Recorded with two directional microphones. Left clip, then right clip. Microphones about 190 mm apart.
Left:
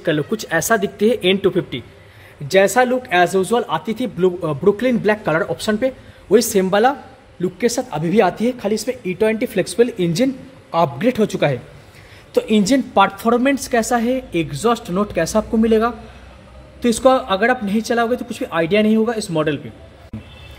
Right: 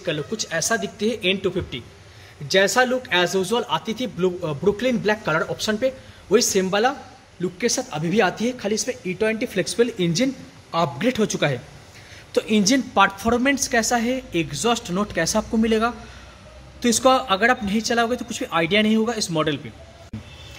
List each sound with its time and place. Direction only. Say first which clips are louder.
0.0 s a man's voice: left 6 dB; 30° left (ahead or behind); by 19.6 s 5° left (ahead or behind)